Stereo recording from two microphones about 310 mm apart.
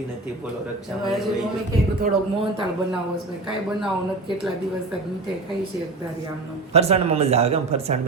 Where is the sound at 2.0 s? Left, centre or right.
Centre.